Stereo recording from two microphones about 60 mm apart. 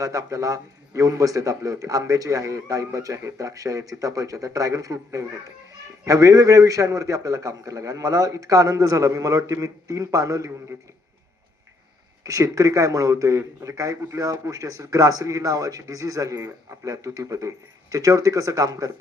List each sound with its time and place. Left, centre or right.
0.0 s a man's voice: right
12.2 s a man's voice: right